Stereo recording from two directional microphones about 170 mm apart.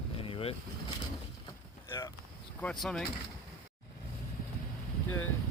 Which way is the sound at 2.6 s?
Centre (ahead or behind).